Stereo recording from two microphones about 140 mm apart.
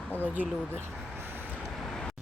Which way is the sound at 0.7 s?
15° right (ahead or behind).